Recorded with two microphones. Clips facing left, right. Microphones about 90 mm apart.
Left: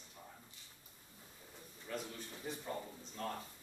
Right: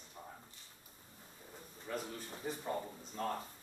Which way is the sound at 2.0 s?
35° right (ahead or behind).